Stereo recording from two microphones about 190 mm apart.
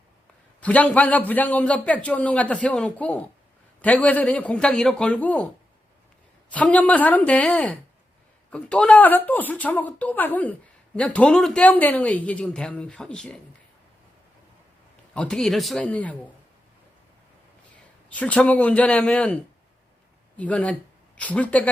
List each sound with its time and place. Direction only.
0.6 s a man's voice: 5° left (ahead or behind)
6.5 s a man's voice: 5° left (ahead or behind)
15.1 s a man's voice: 5° left (ahead or behind)
18.1 s a man's voice: 5° left (ahead or behind)